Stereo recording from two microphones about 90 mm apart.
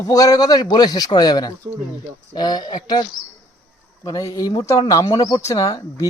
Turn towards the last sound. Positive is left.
turn(degrees=40)  # may be behind; listen again after turning